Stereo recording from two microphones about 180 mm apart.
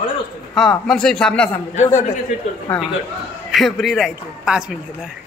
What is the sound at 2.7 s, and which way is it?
Speech, 10° left (ahead or behind).